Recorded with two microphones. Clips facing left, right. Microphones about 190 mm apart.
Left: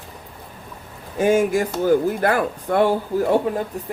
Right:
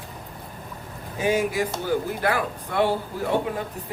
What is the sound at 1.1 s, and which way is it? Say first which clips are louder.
Speech: left 6 dB; 50° left (ahead or behind).